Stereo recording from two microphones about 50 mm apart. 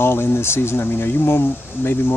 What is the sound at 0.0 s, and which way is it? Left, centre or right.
Speech, left.